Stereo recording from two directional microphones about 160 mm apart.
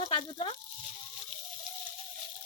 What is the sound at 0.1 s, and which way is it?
Speech, 35° left (ahead or behind).